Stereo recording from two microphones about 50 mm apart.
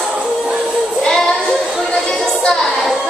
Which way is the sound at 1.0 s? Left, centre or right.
Centre.